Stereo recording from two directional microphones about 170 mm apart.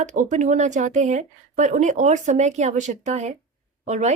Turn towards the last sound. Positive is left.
turn(degrees=-40)  # may be behind; listen again after turning